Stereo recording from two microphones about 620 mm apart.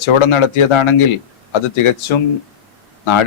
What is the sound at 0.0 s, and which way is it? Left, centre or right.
Speech, left.